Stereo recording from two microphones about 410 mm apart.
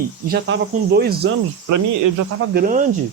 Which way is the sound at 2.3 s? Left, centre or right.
Right.